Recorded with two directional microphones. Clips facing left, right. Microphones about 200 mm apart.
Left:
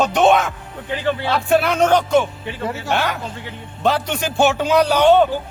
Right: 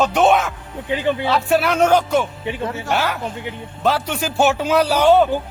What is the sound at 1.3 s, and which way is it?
Speech, centre (ahead or behind).